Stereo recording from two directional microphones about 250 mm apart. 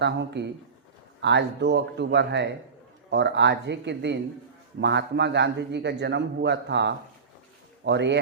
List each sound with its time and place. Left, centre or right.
0.0 s a man's voice: right